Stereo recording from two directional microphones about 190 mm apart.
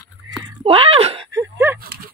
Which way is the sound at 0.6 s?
30° right (ahead or behind).